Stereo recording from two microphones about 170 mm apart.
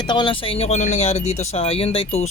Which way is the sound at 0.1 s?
30° left (ahead or behind).